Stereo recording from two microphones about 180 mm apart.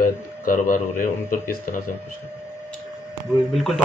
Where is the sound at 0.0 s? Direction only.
50° left (ahead or behind).